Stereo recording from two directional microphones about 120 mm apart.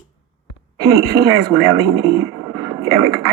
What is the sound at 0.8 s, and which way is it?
A woman's voice, 25° right (ahead or behind).